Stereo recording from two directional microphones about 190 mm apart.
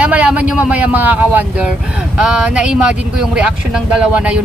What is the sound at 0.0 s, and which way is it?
Speech, 5° right (ahead or behind).